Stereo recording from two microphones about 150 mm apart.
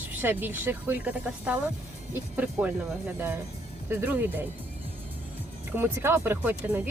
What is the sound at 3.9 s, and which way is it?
Speech, 15° right (ahead or behind).